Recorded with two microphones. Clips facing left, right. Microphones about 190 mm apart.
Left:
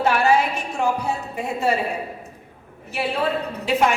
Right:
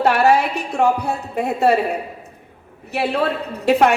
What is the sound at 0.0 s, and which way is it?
A woman's voice, 65° right (ahead or behind).